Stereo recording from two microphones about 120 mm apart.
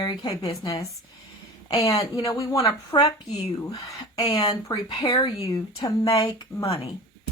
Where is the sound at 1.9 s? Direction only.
25° left (ahead or behind).